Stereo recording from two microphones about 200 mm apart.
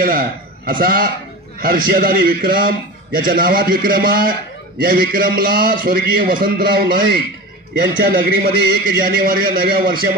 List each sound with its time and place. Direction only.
0.0 s a man's voice: 45° right (ahead or behind)